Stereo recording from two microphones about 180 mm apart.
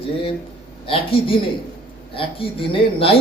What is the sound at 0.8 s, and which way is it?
Speech, 30° left (ahead or behind).